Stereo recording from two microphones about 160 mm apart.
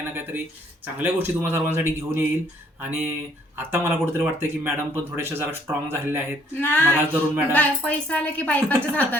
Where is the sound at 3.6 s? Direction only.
15° right (ahead or behind).